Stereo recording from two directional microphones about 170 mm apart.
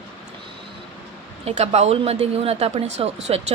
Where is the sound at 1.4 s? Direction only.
40° right (ahead or behind).